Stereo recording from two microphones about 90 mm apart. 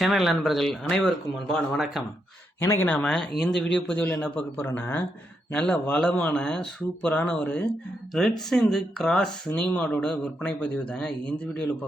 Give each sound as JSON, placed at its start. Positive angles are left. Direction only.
{"t": 0.0, "sound": "speech", "side_deg": 0}
{"t": 2.6, "sound": "speech", "side_deg": 25}
{"t": 2.9, "sound": "speech", "side_deg": 10}
{"t": 3.6, "sound": "speech", "side_deg": 15}
{"t": 8.1, "sound": "speech", "side_deg": 5}